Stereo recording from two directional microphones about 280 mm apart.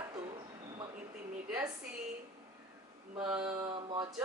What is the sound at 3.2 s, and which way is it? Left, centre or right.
Speech, centre.